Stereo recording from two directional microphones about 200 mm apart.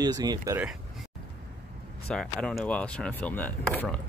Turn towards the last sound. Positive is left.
turn(degrees=10)  # may be behind; listen again after turning